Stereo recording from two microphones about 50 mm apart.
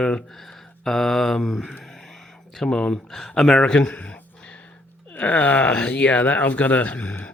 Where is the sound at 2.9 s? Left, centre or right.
Centre.